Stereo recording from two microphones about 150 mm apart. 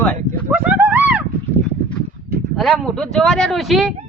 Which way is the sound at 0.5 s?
10° right (ahead or behind).